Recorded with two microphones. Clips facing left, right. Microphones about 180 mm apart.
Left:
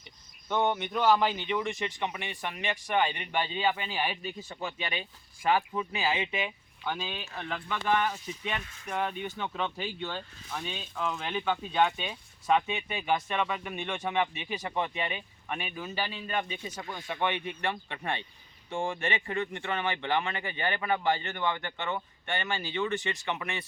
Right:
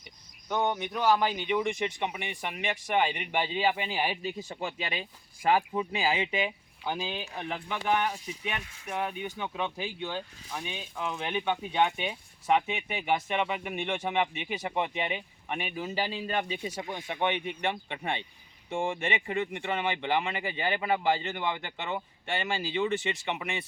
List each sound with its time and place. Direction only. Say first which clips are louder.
0.4 s speech: left 1 dB; 15° right (ahead or behind)
4.4 s speech: right 1 dB; 35° right (ahead or behind)
6.8 s speech: right 2 dB; 15° right (ahead or behind)
16.1 s speech: right 2 dB; 30° right (ahead or behind)
16.6 s speech: right 2 dB; 15° right (ahead or behind)